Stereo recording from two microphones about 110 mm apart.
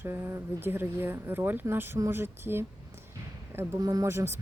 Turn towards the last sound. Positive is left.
turn(degrees=-25)  # may be behind; listen again after turning